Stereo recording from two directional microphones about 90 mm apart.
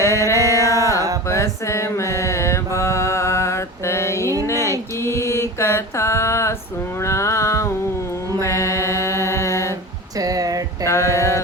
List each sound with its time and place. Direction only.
0.0 s music: 35° left (ahead or behind)
1.3 s mantra: 30° left (ahead or behind)
7.0 s music: 35° left (ahead or behind)
8.4 s a capella: 35° left (ahead or behind)
10.2 s a sound: 40° right (ahead or behind)
10.8 s mantra: 30° left (ahead or behind)